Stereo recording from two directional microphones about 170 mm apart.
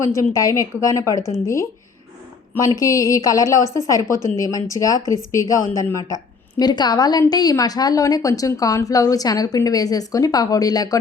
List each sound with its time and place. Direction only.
0.1 s a woman's voice: 20° left (ahead or behind)
2.6 s a woman's voice: 20° left (ahead or behind)